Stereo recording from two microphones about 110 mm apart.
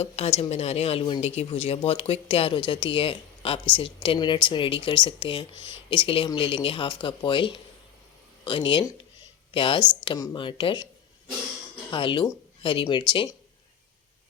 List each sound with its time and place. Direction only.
0.0 s speech: 65° left (ahead or behind)
1.5 s speech: 60° left (ahead or behind)
11.9 s speech: 50° left (ahead or behind)